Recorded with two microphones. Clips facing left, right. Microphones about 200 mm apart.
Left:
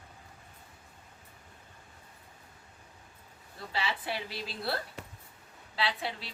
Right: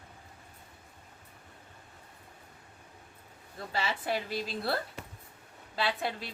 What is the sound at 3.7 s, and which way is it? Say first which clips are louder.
A woman's voice: right 3 dB; 45° right (ahead or behind).